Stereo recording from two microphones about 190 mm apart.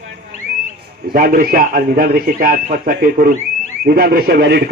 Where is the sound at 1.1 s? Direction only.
50° right (ahead or behind).